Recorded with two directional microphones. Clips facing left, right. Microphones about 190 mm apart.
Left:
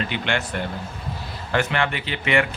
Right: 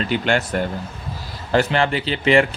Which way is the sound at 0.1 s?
40° right (ahead or behind).